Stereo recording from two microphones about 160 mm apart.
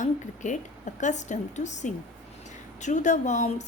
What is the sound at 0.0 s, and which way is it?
A woman's voice, 50° left (ahead or behind).